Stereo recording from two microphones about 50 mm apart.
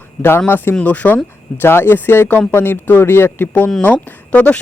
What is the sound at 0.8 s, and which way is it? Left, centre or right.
Speech, left.